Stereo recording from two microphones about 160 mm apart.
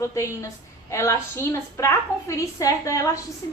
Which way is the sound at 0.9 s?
20° left (ahead or behind).